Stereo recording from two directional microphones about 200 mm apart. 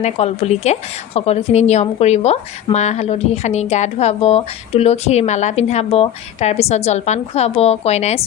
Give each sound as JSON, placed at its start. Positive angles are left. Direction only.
{"t": 0.0, "sound": "a woman's voice", "side_deg": 30}